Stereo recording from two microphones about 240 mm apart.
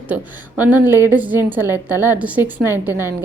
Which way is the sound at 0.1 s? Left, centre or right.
Centre.